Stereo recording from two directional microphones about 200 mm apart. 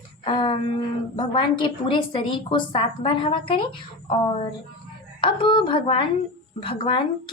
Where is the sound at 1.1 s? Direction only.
25° left (ahead or behind).